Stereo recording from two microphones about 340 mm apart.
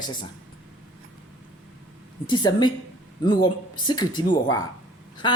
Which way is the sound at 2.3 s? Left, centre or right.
Centre.